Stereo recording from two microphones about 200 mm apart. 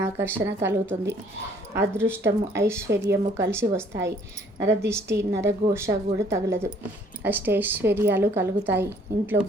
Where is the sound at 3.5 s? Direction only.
10° right (ahead or behind).